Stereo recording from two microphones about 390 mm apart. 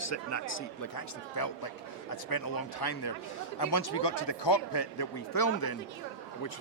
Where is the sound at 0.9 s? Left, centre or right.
Left.